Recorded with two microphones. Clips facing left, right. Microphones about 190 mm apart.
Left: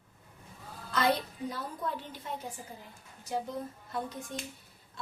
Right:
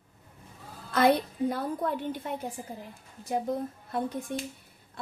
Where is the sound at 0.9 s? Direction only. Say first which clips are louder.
Right 6 dB; 55° right (ahead or behind).